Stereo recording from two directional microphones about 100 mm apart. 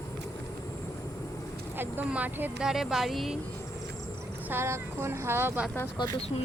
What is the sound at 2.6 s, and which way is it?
Speech, 5° right (ahead or behind).